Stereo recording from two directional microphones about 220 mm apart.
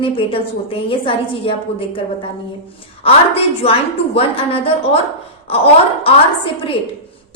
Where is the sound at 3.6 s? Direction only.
25° left (ahead or behind).